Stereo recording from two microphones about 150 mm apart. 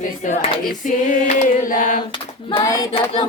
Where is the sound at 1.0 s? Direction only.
60° left (ahead or behind).